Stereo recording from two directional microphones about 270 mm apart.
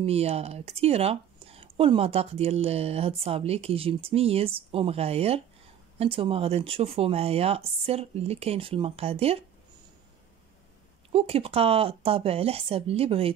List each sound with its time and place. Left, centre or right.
0.0 s speech: right
11.1 s speech: right